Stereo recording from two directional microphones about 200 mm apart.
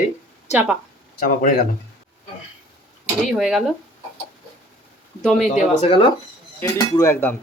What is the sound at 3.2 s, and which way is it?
Speech, centre (ahead or behind).